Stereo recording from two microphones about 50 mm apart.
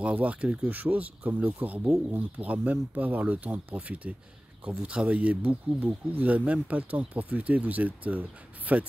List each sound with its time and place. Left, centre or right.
0.0 s speech: right
0.7 s speech: right